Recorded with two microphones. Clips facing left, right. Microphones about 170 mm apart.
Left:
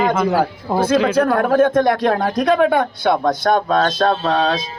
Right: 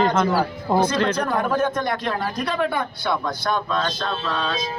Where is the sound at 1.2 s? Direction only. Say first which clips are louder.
Left 7 dB; 60° left (ahead or behind).